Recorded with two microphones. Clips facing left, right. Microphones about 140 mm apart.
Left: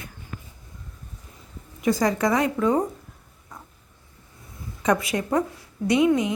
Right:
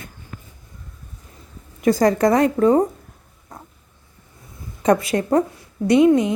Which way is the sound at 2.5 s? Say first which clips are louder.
Right 6 dB; 35° right (ahead or behind).